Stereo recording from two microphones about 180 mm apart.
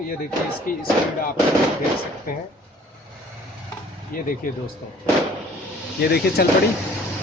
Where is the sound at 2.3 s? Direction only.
50° left (ahead or behind).